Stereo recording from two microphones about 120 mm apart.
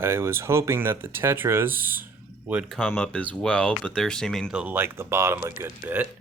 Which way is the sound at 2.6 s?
Centre (ahead or behind).